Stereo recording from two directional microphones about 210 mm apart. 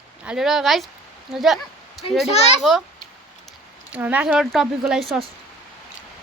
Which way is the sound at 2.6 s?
Centre (ahead or behind).